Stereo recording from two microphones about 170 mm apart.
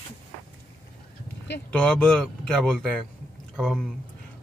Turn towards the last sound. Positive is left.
turn(degrees=0)  # may be behind; listen again after turning